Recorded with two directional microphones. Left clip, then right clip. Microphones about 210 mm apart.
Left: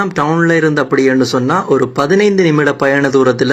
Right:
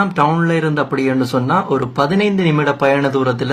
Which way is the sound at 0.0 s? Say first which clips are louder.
Left 2 dB; 20° left (ahead or behind).